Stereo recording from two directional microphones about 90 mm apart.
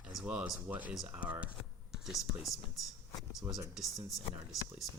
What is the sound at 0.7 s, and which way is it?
Speech, 15° right (ahead or behind).